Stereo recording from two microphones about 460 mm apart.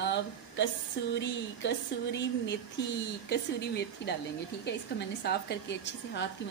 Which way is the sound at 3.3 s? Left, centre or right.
Left.